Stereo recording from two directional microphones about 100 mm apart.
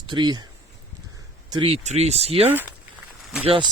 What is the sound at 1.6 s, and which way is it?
Speech, 80° right.